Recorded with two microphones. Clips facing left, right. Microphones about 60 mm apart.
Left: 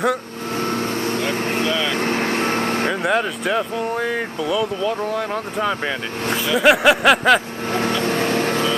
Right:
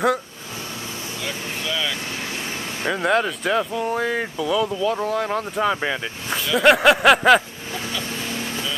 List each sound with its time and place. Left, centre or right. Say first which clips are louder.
0.7 s vehicle: left 11 dB; left
2.9 s speech: even; centre
7.7 s vehicle: left 9 dB; left